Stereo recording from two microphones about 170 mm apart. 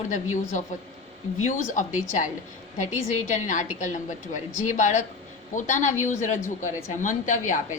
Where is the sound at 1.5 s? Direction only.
50° left (ahead or behind).